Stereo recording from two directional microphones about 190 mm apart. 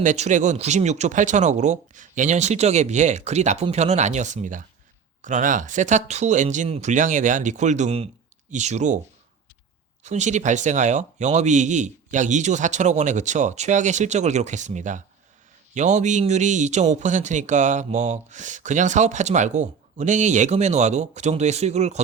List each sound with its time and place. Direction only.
0.0 s speech: 40° right (ahead or behind)
10.0 s speech: 40° right (ahead or behind)